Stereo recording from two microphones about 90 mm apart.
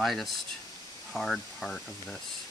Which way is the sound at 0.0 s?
Centre (ahead or behind).